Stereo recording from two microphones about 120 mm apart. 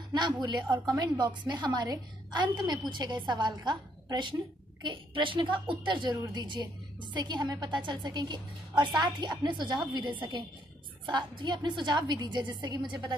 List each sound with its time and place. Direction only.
0.1 s a woman's voice: 35° right (ahead or behind)